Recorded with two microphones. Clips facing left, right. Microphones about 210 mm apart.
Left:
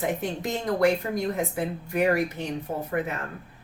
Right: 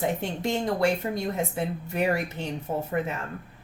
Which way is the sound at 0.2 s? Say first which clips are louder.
Right 1 dB; 25° right (ahead or behind).